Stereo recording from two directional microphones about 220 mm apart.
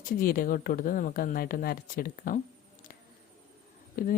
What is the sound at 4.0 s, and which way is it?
Speech, 40° left (ahead or behind).